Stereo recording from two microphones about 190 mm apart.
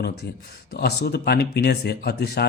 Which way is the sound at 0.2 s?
65° left (ahead or behind).